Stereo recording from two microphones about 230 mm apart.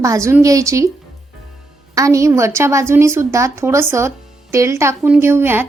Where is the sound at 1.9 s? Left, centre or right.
Centre.